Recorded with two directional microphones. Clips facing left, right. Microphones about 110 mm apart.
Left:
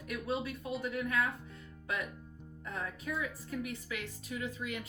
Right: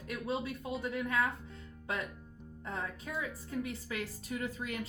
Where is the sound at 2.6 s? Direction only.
30° right (ahead or behind).